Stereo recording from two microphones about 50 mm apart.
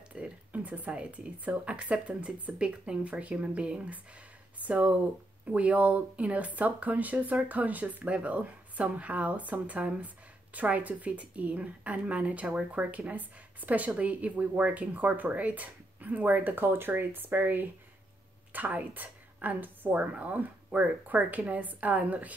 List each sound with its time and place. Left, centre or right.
0.1 s speech: right
18.5 s speech: right